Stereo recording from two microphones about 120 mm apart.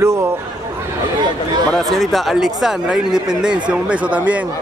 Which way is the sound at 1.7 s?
Centre (ahead or behind).